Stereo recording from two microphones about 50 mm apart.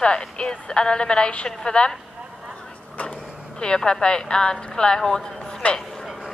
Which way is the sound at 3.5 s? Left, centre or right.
Centre.